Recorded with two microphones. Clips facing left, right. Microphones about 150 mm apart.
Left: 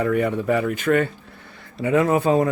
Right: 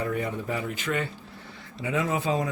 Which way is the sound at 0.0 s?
70° left (ahead or behind).